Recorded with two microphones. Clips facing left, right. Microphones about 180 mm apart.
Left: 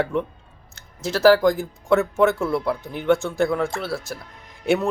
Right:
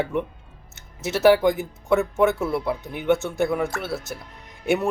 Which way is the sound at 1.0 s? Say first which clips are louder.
Left 1 dB; 20° right (ahead or behind).